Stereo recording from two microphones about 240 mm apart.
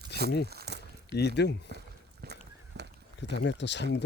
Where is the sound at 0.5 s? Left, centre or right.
Right.